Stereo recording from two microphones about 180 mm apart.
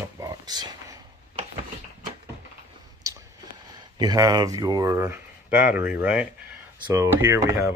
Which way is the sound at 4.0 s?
20° right (ahead or behind).